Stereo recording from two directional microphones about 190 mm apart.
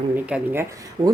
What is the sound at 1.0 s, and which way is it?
Speech, 30° right (ahead or behind).